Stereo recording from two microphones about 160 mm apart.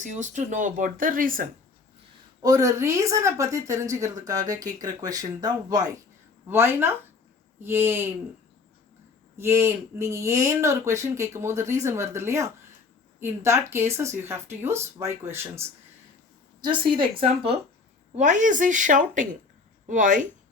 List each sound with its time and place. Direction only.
0.0 s speech: 50° right (ahead or behind)
2.4 s a woman's voice: 20° right (ahead or behind)
9.4 s speech: 15° right (ahead or behind)
16.6 s a woman's voice: 30° right (ahead or behind)
18.2 s a woman's voice: 50° right (ahead or behind)